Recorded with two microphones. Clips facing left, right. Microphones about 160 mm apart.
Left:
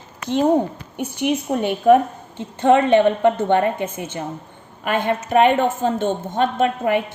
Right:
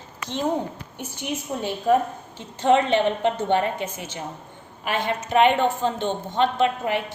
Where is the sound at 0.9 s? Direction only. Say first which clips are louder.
Left 10 dB; 65° left (ahead or behind).